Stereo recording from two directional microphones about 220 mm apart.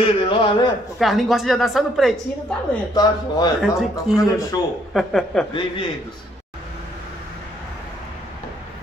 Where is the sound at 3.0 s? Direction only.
20° left (ahead or behind).